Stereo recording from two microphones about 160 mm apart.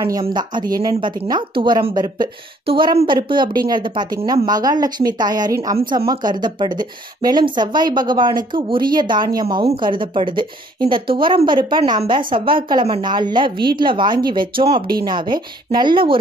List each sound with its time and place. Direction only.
0.2 s a woman's voice: 30° right (ahead or behind)